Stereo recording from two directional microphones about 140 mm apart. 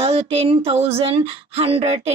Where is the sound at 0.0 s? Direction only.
45° right (ahead or behind).